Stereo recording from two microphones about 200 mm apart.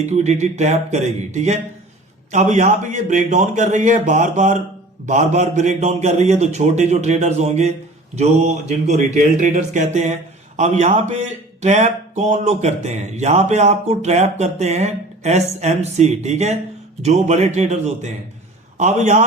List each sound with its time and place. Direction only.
0.0 s a man's voice: 35° right (ahead or behind)
9.1 s a man's voice: 35° right (ahead or behind)